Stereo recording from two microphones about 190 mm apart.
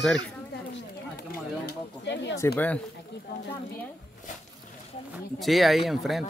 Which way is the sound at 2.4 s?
10° left (ahead or behind).